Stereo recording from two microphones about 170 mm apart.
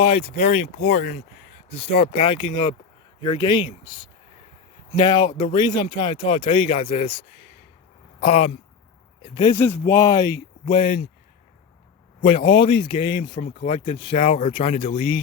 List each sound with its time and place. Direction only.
0.0 s speech: 30° left (ahead or behind); by 1.2 s 45° left (ahead or behind)
1.7 s speech: 35° left (ahead or behind)
9.2 s speech: 25° left (ahead or behind)
12.2 s speech: 30° left (ahead or behind)